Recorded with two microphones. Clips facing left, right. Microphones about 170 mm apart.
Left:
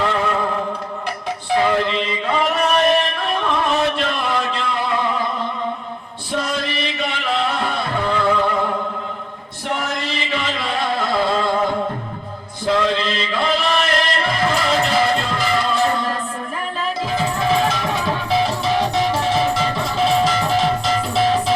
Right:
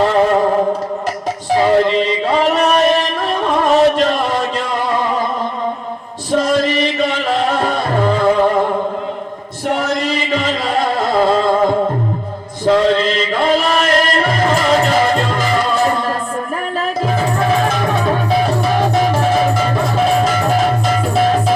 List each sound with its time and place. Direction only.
0.0 s music: 40° right (ahead or behind)
6.3 s music: 40° right (ahead or behind)
9.6 s music: 40° right (ahead or behind)
12.6 s chant: 40° right (ahead or behind)
17.1 s music: 50° right (ahead or behind)